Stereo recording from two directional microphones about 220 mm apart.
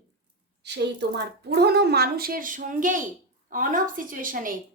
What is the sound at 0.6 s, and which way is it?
A woman's voice, 50° right (ahead or behind).